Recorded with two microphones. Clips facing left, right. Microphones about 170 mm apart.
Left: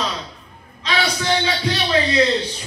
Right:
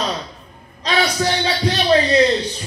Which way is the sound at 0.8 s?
40° right (ahead or behind).